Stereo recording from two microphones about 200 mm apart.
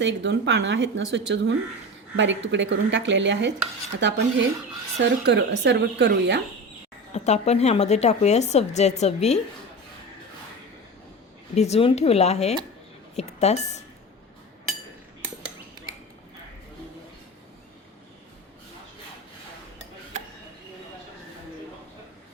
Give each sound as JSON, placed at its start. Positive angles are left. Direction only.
{"t": 0.0, "sound": "speech", "side_deg": -65}
{"t": 7.1, "sound": "a woman's voice", "side_deg": 35}
{"t": 11.5, "sound": "a woman's voice", "side_deg": 30}